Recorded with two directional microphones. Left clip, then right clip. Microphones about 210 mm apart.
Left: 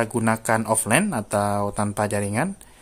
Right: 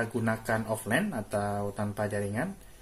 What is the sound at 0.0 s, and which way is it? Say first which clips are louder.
Speech: left 8 dB; 45° left (ahead or behind).